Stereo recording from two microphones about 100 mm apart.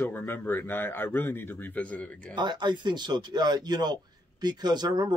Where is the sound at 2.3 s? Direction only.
50° right (ahead or behind).